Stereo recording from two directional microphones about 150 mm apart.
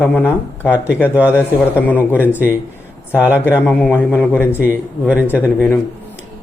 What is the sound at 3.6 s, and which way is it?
Speech, 10° left (ahead or behind).